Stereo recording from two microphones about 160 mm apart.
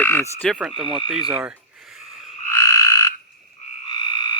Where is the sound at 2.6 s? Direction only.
20° left (ahead or behind).